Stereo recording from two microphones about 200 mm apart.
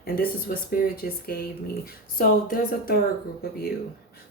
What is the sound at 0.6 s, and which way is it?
Speech, 45° left (ahead or behind).